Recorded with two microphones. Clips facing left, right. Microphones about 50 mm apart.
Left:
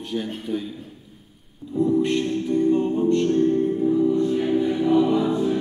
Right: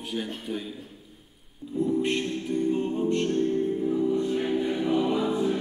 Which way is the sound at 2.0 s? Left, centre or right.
Centre.